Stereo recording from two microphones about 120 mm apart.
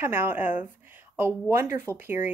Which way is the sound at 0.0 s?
20° right (ahead or behind).